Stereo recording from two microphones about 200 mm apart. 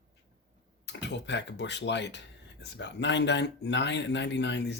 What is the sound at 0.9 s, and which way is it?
Speech, 60° left (ahead or behind).